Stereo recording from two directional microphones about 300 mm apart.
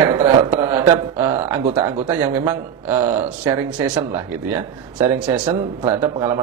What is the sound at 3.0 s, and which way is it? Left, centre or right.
Speech, right.